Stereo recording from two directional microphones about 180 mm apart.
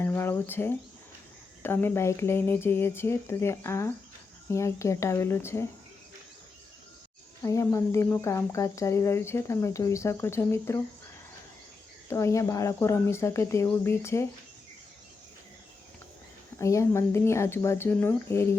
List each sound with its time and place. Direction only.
0.0 s speech: 15° left (ahead or behind)
7.4 s speech: 15° left (ahead or behind)
12.0 s speech: 15° left (ahead or behind)
16.6 s speech: 15° left (ahead or behind)